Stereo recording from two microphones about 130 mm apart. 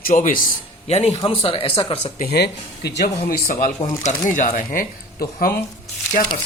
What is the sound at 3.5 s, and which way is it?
Speech, 90° left.